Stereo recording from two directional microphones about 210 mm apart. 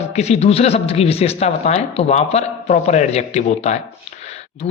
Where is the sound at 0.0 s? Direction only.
30° left (ahead or behind).